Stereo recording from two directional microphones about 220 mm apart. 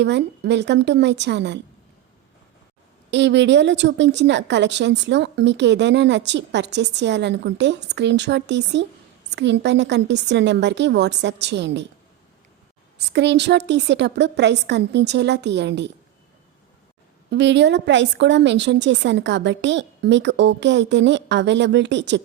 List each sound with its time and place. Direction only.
0.0 s a woman's voice: 50° right (ahead or behind)
3.1 s a woman's voice: 55° right (ahead or behind)
13.1 s a woman's voice: 50° right (ahead or behind)
17.3 s a woman's voice: 55° right (ahead or behind)